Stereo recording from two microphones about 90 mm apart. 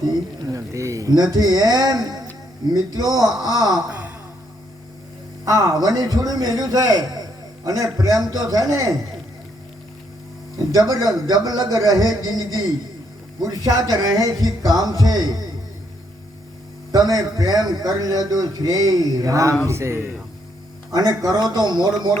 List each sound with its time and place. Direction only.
0.0 s a man's voice: 40° right (ahead or behind)
3.8 s a sound: 20° right (ahead or behind)
5.5 s a man's voice: 40° right (ahead or behind)
10.7 s a man's voice: 45° right (ahead or behind)
16.9 s a man's voice: 45° right (ahead or behind); by 20.1 s 30° right (ahead or behind)
20.9 s a man's voice: 45° right (ahead or behind)